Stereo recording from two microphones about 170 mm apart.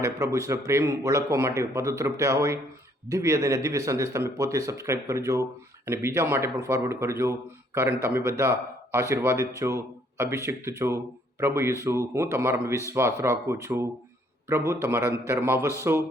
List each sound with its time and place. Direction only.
0.0 s speech: 20° right (ahead or behind)
8.4 s speech: 15° right (ahead or behind)